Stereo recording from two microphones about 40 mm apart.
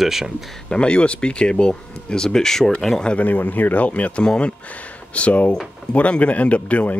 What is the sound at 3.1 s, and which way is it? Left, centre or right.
Speech, left.